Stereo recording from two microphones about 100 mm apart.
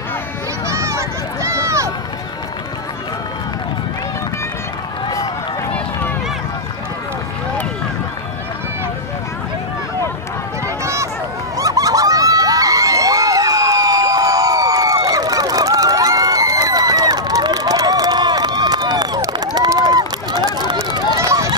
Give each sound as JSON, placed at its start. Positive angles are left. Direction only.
{"t": 0.7, "sound": "run", "side_deg": -30}
{"t": 10.8, "sound": "run", "side_deg": -30}
{"t": 11.5, "sound": "crowd", "side_deg": -35}
{"t": 15.0, "sound": "a sound", "side_deg": -40}
{"t": 21.2, "sound": "run", "side_deg": -35}